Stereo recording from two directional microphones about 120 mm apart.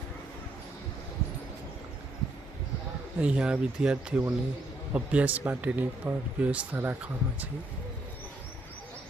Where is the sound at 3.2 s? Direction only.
10° right (ahead or behind).